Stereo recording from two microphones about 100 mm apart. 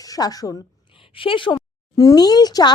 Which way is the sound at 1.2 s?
60° left (ahead or behind).